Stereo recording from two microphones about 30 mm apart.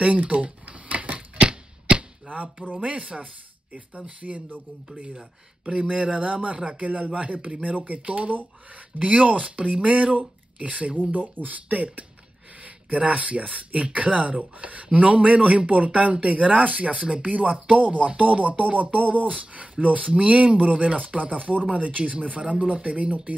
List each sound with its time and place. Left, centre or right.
0.0 s a sound: right
1.9 s arrow: right
2.7 s speech: right
5.7 s speech: right
9.2 s speech: right
11.0 s speech: right
16.9 s speech: right
17.2 s speech: right
19.3 s speech: right